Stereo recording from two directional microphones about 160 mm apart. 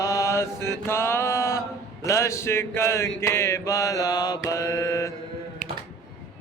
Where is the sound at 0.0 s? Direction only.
20° left (ahead or behind).